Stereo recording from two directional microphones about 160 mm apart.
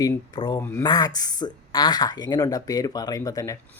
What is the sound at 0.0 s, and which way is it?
Speech, 30° left (ahead or behind).